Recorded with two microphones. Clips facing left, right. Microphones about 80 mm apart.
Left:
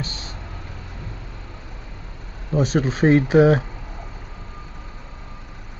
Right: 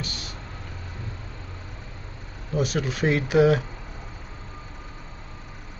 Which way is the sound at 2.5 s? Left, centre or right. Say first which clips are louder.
Left 5 dB; left.